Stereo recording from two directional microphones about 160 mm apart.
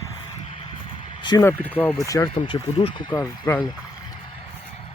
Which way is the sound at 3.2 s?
15° left (ahead or behind).